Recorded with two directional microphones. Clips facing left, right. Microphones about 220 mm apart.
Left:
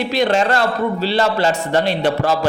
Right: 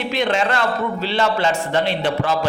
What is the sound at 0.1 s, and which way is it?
Speech, 40° left (ahead or behind).